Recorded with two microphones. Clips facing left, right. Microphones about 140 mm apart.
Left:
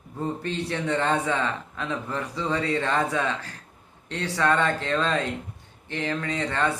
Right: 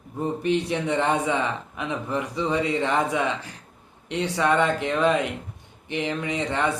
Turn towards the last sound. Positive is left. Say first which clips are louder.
# right 1 dB
turn(degrees=-15)  # may be behind; listen again after turning